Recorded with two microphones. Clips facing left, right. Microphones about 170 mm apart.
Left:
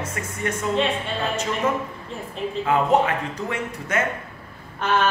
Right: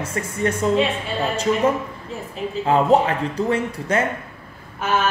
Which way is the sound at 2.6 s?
30° right (ahead or behind).